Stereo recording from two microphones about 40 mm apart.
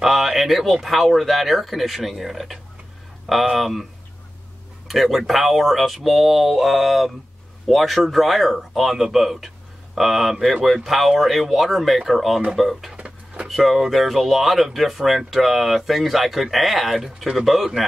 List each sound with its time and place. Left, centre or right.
0.0 s speech: centre
4.8 s speech: centre
12.9 s a sound: right
13.5 s a man's voice: centre